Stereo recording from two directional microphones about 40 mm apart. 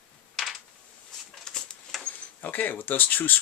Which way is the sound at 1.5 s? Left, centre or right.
Centre.